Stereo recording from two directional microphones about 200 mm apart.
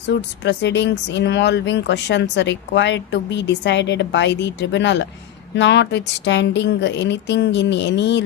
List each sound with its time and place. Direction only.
0.2 s speech: 60° left (ahead or behind)